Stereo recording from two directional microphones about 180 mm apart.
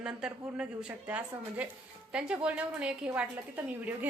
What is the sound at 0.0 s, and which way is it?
A woman's voice, 5° right (ahead or behind).